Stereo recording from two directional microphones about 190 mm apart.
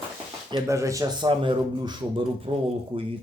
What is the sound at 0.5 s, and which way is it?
Speech, 15° right (ahead or behind).